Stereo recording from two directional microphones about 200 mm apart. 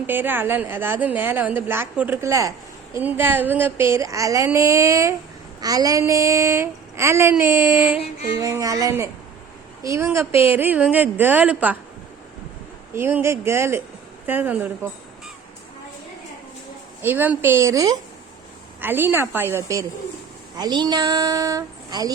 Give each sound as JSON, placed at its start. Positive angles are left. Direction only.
{"t": 0.1, "sound": "a woman's voice", "side_deg": -10}
{"t": 12.9, "sound": "a woman's voice", "side_deg": -10}
{"t": 17.0, "sound": "a woman's voice", "side_deg": -10}